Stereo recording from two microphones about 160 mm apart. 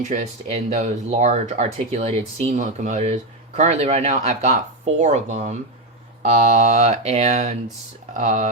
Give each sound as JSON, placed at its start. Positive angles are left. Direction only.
{"t": 0.0, "sound": "speech", "side_deg": -45}